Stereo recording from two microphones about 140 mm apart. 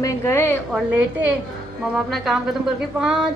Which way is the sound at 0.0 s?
20° left (ahead or behind).